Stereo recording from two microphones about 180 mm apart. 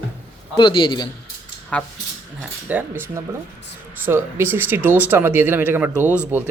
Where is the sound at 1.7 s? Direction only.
5° left (ahead or behind).